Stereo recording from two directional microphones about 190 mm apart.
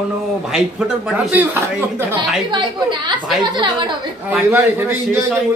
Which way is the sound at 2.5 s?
25° right (ahead or behind).